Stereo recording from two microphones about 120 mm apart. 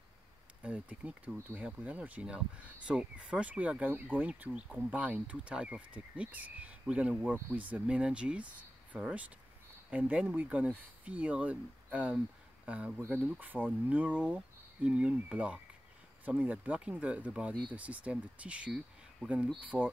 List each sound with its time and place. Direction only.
0.6 s speech: 10° right (ahead or behind)
7.3 s speech: 20° right (ahead or behind)
7.7 s speech: 10° right (ahead or behind)